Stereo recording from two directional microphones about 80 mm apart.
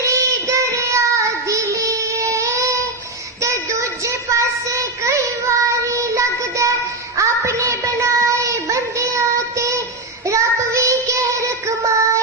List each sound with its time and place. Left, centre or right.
0.0 s child singing: right
3.4 s a sound: right
7.2 s child singing: right